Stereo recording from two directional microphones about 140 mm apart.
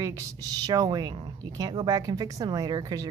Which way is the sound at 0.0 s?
25° right (ahead or behind).